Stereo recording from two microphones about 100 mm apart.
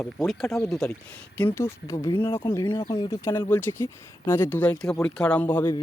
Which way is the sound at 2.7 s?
45° left (ahead or behind).